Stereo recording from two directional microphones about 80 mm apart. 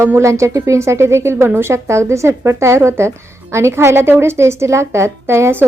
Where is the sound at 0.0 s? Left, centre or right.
Right.